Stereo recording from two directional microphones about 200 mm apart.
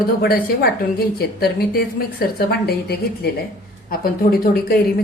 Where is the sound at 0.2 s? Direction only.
50° left (ahead or behind).